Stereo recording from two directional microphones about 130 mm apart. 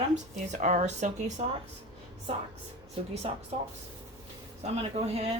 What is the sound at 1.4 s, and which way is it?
Speech, 50° right (ahead or behind).